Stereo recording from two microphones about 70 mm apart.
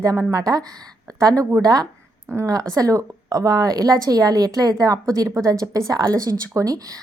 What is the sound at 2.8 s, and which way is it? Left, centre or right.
A woman's voice, right.